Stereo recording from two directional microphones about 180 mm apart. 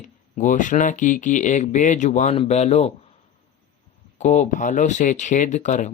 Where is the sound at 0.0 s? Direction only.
45° left (ahead or behind).